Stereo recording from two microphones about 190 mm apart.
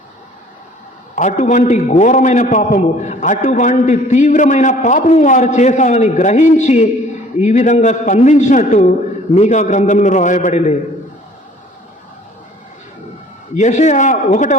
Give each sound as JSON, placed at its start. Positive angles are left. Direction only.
{"t": 1.1, "sound": "a man's voice", "side_deg": 40}
{"t": 13.6, "sound": "a man's voice", "side_deg": 40}